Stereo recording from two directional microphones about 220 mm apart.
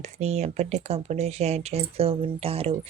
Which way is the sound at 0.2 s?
30° right (ahead or behind).